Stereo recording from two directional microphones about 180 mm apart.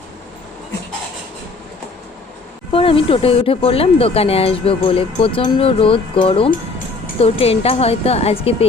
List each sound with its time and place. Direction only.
2.7 s speech: 30° left (ahead or behind)